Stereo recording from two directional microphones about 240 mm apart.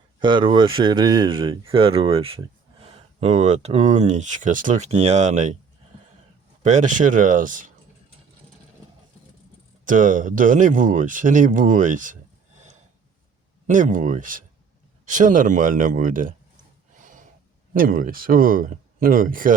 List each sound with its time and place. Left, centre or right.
0.2 s speech: centre
6.6 s speech: right
9.8 s speech: right
17.0 s a sound: right
17.7 s speech: right